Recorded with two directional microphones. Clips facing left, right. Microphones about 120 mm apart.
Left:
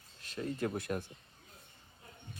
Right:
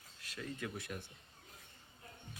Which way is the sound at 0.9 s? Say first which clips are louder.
Left 9 dB; 55° left (ahead or behind).